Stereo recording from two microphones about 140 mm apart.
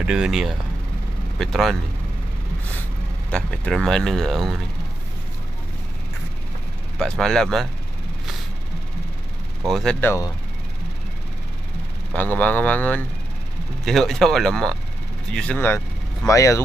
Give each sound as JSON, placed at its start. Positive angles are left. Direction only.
{"t": 0.0, "sound": "speech", "side_deg": -5}
{"t": 3.3, "sound": "speech", "side_deg": 5}
{"t": 7.0, "sound": "speech", "side_deg": 5}
{"t": 9.7, "sound": "speech", "side_deg": 0}
{"t": 9.9, "sound": "speech", "side_deg": 15}
{"t": 12.1, "sound": "speech", "side_deg": 10}
{"t": 16.3, "sound": "speech", "side_deg": 20}